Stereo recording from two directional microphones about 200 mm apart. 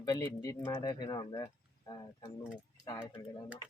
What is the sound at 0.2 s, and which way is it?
Speech, 15° left (ahead or behind).